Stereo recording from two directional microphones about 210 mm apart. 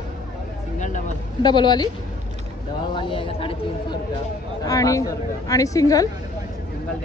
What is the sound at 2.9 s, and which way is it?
A woman's voice, 25° left (ahead or behind).